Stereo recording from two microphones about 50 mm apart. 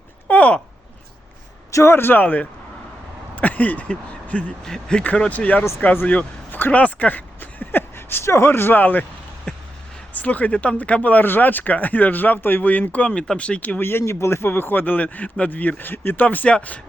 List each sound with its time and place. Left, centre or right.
0.3 s a sound: left
1.9 s speech: left
4.6 s speech: centre
5.1 s speech: left
6.1 s a sound: left
7.9 s speech: left
9.5 s a sound: centre
10.2 s speech: left
13.1 s speech: centre
13.7 s speech: left
14.0 s speech: left